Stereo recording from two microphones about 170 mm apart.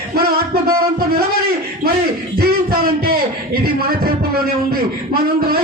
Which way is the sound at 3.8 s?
65° right (ahead or behind).